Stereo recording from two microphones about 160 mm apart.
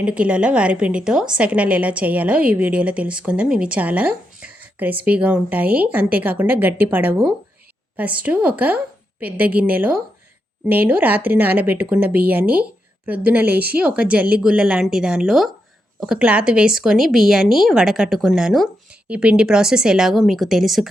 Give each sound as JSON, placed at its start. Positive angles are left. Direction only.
{"t": 0.0, "sound": "a woman's voice", "side_deg": -5}